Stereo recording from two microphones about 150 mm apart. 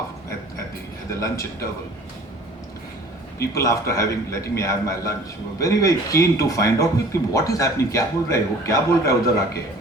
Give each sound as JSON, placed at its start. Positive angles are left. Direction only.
{"t": 1.2, "sound": "a man's voice", "side_deg": 20}
{"t": 3.3, "sound": "a man's voice", "side_deg": 20}